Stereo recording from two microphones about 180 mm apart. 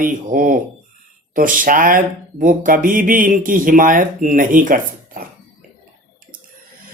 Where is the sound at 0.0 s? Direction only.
50° right (ahead or behind).